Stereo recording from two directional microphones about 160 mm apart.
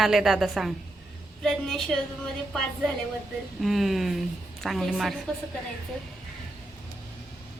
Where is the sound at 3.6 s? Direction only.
Centre (ahead or behind).